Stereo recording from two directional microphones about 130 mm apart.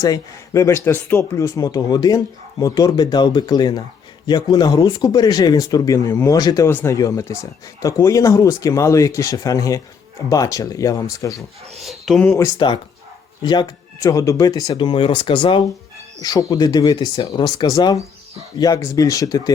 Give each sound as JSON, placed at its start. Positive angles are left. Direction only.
{"t": 0.0, "sound": "speech", "side_deg": 25}
{"t": 11.8, "sound": "speech", "side_deg": 0}
{"t": 12.2, "sound": "speech", "side_deg": 20}
{"t": 12.5, "sound": "speech", "side_deg": 35}
{"t": 16.2, "sound": "speech", "side_deg": 30}